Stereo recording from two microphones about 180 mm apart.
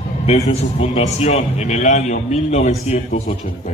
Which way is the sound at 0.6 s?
35° left (ahead or behind).